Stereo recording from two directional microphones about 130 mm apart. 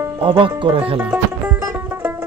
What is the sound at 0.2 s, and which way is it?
Speech, 40° right (ahead or behind).